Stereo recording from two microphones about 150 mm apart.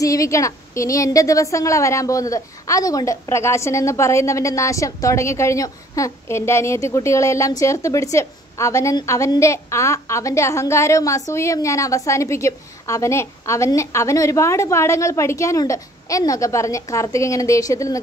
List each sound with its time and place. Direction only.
0.0 s a woman's voice: 20° left (ahead or behind)